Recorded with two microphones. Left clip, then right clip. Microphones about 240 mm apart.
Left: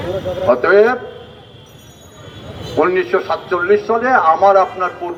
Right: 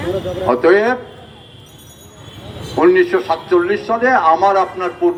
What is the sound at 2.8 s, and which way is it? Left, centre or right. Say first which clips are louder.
A man's voice: right 2 dB; right.